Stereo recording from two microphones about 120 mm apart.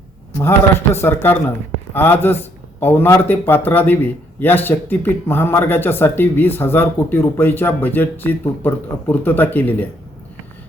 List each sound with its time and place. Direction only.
1.0 s speech: 20° left (ahead or behind)